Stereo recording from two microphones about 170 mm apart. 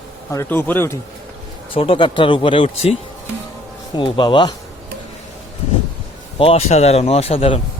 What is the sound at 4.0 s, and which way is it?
Speech, 30° left (ahead or behind).